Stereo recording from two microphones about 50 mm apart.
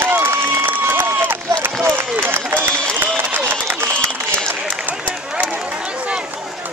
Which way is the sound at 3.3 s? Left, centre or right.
Right.